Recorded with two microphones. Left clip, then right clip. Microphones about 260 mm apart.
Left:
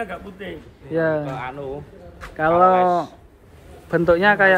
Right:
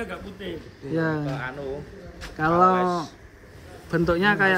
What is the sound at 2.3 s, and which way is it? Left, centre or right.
Speech, centre.